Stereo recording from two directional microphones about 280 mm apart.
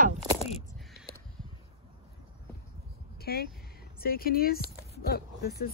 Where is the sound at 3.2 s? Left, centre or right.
Left.